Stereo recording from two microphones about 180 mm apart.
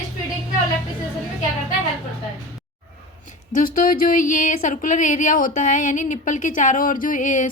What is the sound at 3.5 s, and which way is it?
Speech, 50° left (ahead or behind).